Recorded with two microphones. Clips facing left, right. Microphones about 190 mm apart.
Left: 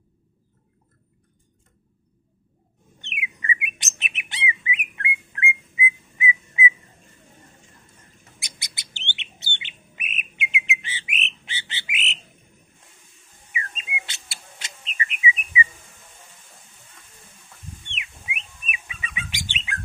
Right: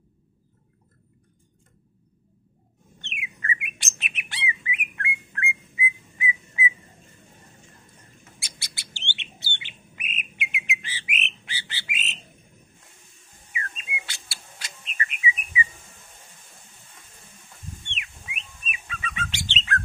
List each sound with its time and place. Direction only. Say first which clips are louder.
3.0 s bird: left 2 dB; 15° left (ahead or behind)
8.4 s bird: left 3 dB; 20° left (ahead or behind)
11.1 s frog: left 1 dB; 20° left (ahead or behind)
13.7 s bird: left 2 dB; 20° left (ahead or behind)
18.7 s bird: right 2 dB; 15° left (ahead or behind)